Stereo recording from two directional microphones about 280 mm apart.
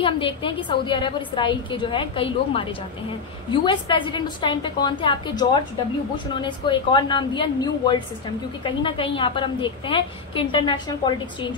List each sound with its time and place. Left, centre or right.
0.0 s a woman's voice: centre